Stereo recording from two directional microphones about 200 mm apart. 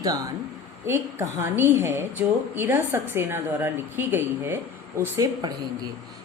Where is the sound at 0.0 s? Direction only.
15° right (ahead or behind).